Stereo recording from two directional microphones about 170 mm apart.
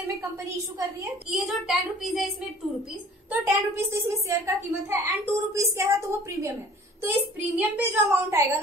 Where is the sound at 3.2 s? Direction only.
10° right (ahead or behind).